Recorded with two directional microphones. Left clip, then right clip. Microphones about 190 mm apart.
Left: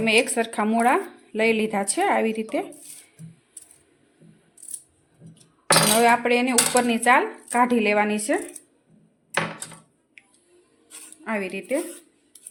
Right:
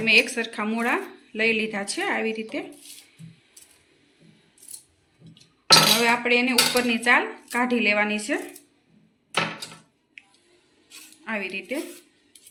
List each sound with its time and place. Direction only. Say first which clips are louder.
0.0 s speech: right 1 dB; 60° left (ahead or behind)
6.0 s speech: left 2 dB; 60° left (ahead or behind)
11.2 s speech: left 1 dB; 60° left (ahead or behind)